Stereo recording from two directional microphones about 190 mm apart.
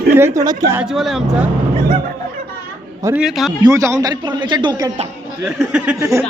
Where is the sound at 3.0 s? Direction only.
10° right (ahead or behind).